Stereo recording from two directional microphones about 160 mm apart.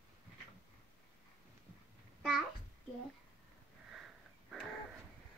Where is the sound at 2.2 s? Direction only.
Centre (ahead or behind).